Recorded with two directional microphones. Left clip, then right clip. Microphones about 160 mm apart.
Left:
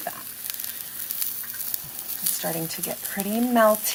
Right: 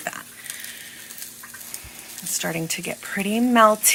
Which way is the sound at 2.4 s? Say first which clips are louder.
Right 4 dB; 10° right (ahead or behind).